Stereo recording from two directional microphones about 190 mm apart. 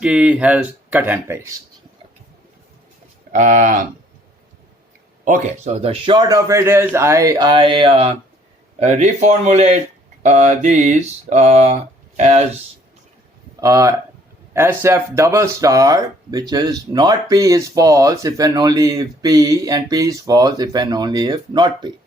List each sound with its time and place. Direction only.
0.0 s speech: 5° right (ahead or behind)
3.3 s mantra: 40° right (ahead or behind)
5.2 s speech: 40° right (ahead or behind)
8.8 s mantra: 40° right (ahead or behind)
13.6 s speech: 15° right (ahead or behind)